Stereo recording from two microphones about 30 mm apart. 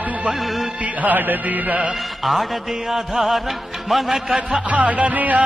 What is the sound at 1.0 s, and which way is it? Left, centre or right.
Music, right.